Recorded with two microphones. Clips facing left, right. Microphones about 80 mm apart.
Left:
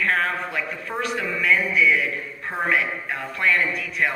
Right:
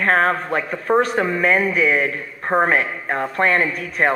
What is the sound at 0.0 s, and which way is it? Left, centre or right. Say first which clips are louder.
A man's voice: right 6 dB; right.